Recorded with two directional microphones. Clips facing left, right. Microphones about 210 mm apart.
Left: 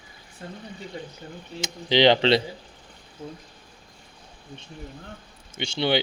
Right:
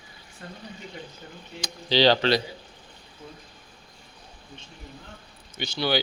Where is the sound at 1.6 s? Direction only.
20° left (ahead or behind).